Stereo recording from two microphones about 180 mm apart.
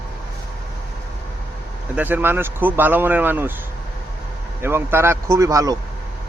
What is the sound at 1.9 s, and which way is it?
A man's voice, 10° right (ahead or behind).